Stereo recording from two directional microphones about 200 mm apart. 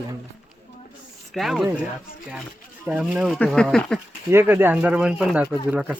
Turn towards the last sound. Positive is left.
turn(degrees=-5)  # may be behind; listen again after turning